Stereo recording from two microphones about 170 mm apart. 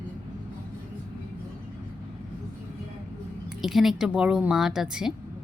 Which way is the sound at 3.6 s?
Centre (ahead or behind).